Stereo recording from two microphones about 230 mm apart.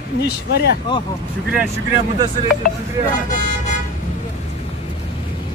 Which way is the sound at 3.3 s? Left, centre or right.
Left.